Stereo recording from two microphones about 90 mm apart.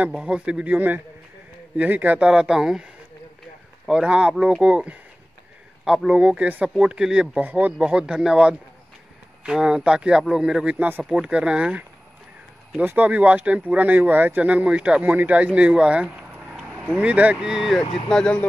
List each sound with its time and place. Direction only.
0.0 s speech: 10° right (ahead or behind)
18.0 s speech: 10° left (ahead or behind)